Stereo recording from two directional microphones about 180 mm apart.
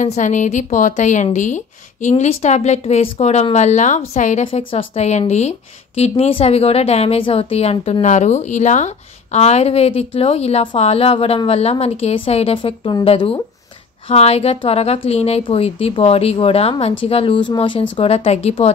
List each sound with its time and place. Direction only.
0.0 s a woman's voice: 45° left (ahead or behind)
4.5 s a woman's voice: 30° left (ahead or behind)